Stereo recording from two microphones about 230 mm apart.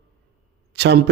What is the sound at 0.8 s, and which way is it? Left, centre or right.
Speech, right.